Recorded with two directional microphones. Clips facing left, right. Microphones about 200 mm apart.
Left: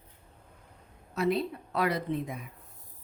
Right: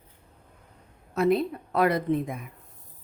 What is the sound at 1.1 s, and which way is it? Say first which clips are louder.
A woman's voice: right 5 dB; 50° right (ahead or behind).